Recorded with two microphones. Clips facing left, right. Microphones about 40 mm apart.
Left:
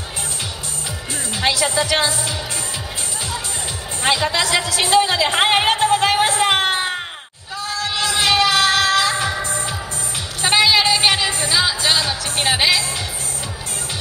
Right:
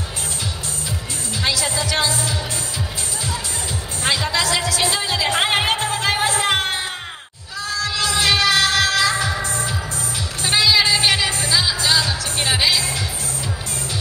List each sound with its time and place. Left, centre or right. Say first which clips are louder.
1.3 s speech: left 3 dB; left
4.0 s a woman's voice: left 2 dB; left
4.7 s music: left 5 dB; left